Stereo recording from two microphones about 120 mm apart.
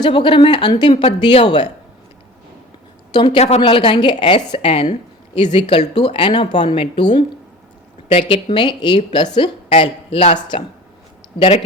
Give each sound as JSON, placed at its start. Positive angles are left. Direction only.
{"t": 0.0, "sound": "speech", "side_deg": 45}
{"t": 3.1, "sound": "a woman's voice", "side_deg": 35}
{"t": 3.3, "sound": "a woman's voice", "side_deg": 65}
{"t": 3.6, "sound": "speech", "side_deg": 45}
{"t": 5.8, "sound": "speech", "side_deg": 55}
{"t": 8.3, "sound": "a woman's voice", "side_deg": 45}